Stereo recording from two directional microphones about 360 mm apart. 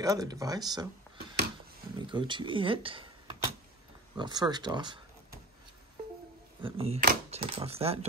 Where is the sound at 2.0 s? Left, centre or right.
Centre.